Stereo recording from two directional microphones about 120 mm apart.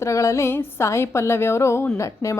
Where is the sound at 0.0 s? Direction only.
25° left (ahead or behind).